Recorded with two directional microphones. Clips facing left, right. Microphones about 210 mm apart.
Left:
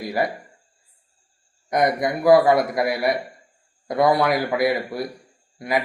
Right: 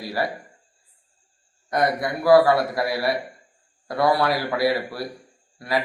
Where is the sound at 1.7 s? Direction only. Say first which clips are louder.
Left 2 dB; 20° left (ahead or behind).